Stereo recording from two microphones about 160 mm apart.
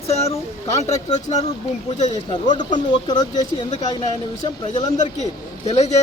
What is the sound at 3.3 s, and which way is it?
Speech, 50° left (ahead or behind).